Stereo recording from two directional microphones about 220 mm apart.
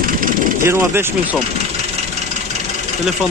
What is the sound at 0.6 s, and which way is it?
Speech, 10° right (ahead or behind).